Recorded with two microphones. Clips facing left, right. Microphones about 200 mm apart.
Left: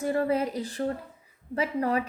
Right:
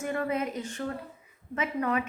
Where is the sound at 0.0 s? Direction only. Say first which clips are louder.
Left 4 dB; 35° left (ahead or behind).